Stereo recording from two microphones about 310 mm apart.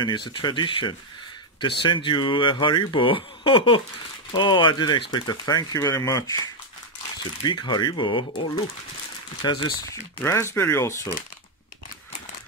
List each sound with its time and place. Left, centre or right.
0.0 s speech: centre
7.4 s speech: centre
9.4 s speech: centre